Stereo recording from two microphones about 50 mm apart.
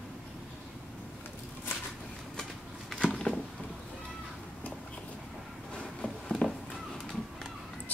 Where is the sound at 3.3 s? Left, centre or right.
Left.